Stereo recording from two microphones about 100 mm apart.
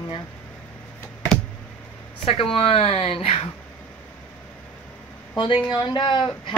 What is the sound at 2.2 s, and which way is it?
Speech, 70° left (ahead or behind).